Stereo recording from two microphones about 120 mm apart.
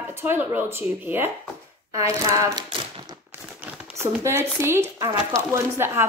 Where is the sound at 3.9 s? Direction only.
20° right (ahead or behind).